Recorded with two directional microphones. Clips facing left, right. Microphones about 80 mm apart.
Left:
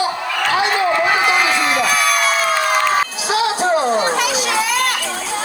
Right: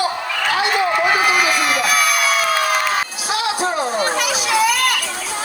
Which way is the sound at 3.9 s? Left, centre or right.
Left.